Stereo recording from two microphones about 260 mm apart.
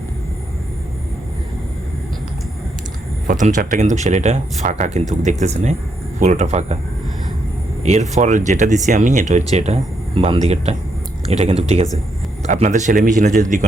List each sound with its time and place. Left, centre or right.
3.2 s speech: right
7.9 s speech: right